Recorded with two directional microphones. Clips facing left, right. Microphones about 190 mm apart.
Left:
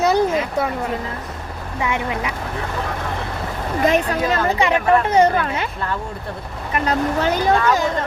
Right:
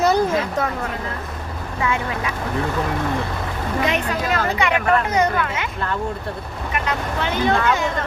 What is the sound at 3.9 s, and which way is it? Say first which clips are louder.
Speech: left 4 dB; 30° left (ahead or behind).